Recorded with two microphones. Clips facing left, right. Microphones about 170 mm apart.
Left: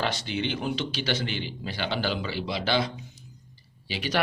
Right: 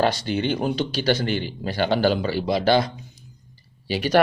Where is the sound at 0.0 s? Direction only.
45° right (ahead or behind).